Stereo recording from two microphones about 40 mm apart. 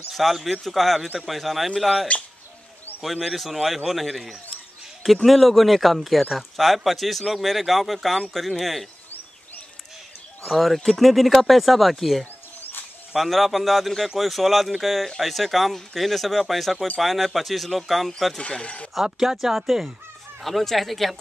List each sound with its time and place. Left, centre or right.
0.1 s a man's voice: centre
2.1 s speech: left
3.0 s a man's voice: centre
10.5 s a man's voice: centre
18.5 s speech: left
18.9 s a man's voice: centre